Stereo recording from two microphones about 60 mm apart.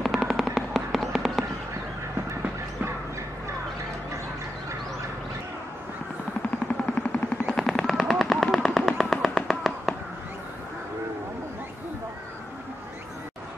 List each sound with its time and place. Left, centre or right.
0.0 s a sound: centre
0.6 s fireworks: centre
6.9 s vehicle: centre
7.5 s vehicle: centre